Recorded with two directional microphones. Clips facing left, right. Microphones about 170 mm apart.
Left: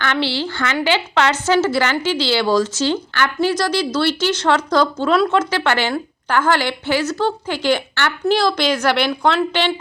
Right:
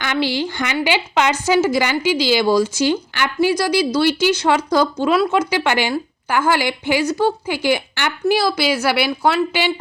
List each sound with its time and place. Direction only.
0.0 s a woman's voice: 15° right (ahead or behind)